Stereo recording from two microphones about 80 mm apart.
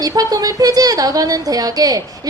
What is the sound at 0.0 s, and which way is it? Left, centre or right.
A woman's voice, right.